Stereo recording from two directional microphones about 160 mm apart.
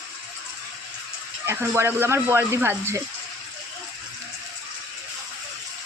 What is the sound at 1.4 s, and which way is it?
Speech, 15° right (ahead or behind).